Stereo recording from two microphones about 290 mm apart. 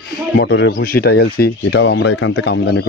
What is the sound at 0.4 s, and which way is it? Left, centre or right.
A man's voice, left.